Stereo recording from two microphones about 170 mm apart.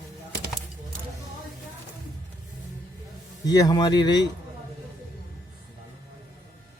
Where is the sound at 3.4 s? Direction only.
25° left (ahead or behind).